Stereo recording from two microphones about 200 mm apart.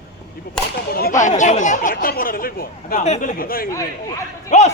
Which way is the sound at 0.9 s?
45° left (ahead or behind).